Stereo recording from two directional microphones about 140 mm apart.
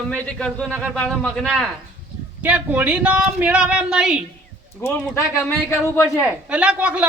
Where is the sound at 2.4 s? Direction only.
10° right (ahead or behind).